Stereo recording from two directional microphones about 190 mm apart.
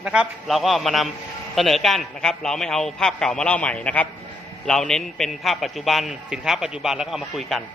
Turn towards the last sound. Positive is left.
turn(degrees=0)  # may be behind; listen again after turning